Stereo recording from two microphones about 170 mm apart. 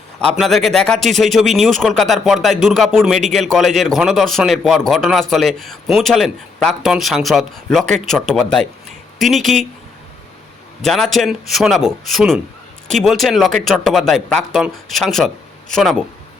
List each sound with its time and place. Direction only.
0.3 s speech: centre (ahead or behind)
10.8 s speech: centre (ahead or behind)